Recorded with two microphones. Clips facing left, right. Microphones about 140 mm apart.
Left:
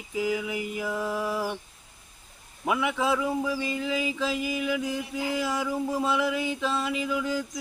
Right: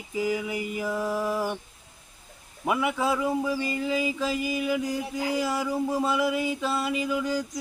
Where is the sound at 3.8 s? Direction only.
40° right (ahead or behind).